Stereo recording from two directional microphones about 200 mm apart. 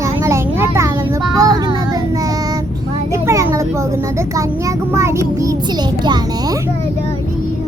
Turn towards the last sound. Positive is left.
turn(degrees=-20)  # may be behind; listen again after turning